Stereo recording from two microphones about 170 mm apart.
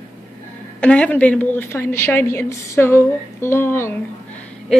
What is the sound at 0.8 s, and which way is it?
A woman's voice, 5° left (ahead or behind).